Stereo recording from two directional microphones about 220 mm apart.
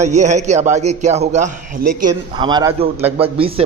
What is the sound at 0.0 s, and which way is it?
A man's voice, 30° right (ahead or behind).